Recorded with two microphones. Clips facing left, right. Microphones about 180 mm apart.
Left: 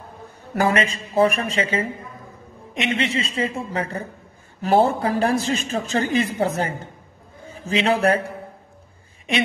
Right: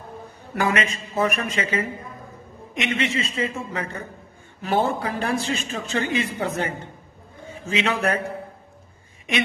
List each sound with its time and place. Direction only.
0.6 s speech: 35° left (ahead or behind)